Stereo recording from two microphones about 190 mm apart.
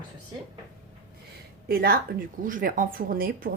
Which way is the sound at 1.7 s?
55° right (ahead or behind).